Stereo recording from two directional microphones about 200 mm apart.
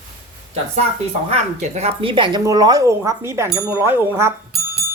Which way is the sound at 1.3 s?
30° right (ahead or behind).